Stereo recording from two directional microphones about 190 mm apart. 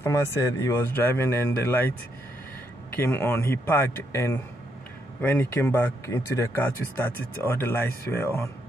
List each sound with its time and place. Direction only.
0.0 s speech: 15° left (ahead or behind)
3.0 s speech: 10° left (ahead or behind)